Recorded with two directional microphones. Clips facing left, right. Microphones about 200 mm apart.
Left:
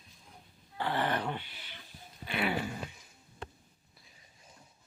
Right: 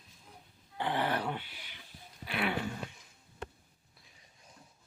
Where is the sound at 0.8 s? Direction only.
20° right (ahead or behind).